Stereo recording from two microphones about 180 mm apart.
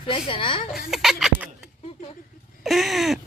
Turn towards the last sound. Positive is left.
turn(degrees=0)  # may be behind; listen again after turning